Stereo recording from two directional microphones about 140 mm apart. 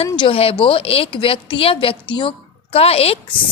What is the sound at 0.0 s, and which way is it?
A woman's voice, 40° left (ahead or behind).